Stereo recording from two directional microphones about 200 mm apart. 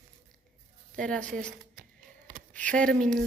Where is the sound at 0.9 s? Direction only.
5° left (ahead or behind).